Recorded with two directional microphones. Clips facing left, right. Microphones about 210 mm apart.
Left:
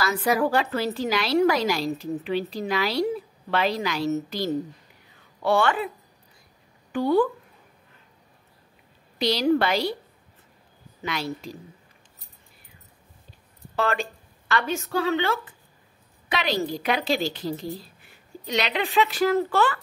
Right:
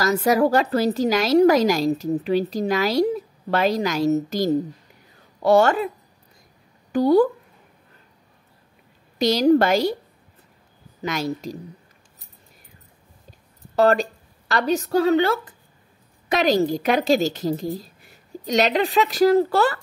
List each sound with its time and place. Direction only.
0.0 s a woman's voice: 40° right (ahead or behind)
5.1 s a sound: 40° right (ahead or behind)
6.9 s a woman's voice: 40° right (ahead or behind)
9.2 s a woman's voice: 45° right (ahead or behind)
11.0 s a woman's voice: 40° right (ahead or behind)
13.7 s a woman's voice: 40° right (ahead or behind)